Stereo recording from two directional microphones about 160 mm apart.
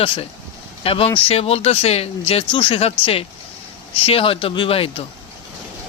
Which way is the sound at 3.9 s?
35° left (ahead or behind).